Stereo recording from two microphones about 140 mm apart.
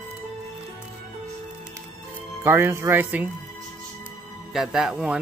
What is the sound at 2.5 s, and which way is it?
Speech, 15° right (ahead or behind).